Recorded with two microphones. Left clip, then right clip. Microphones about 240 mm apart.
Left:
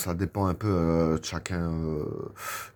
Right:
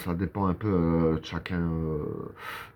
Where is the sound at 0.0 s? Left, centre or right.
Left.